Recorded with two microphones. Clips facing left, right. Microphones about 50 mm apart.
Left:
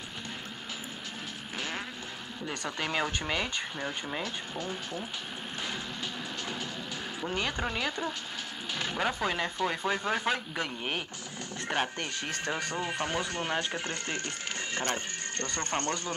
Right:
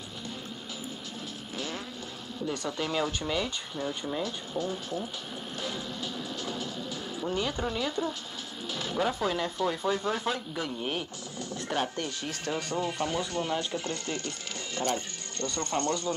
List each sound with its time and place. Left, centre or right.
2.4 s speech: left
6.4 s music: left
7.3 s speech: left